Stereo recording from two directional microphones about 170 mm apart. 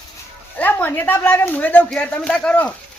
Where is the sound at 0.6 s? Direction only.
10° left (ahead or behind).